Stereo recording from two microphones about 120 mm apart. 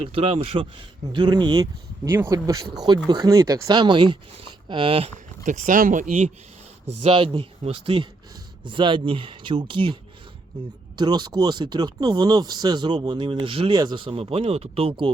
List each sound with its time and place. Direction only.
0.0 s speech: 50° right (ahead or behind)
1.1 s speech: 40° right (ahead or behind)
2.0 s speech: 20° right (ahead or behind); by 5.1 s 50° right (ahead or behind)
5.5 s speech: 90° right
7.0 s speech: 45° right (ahead or behind)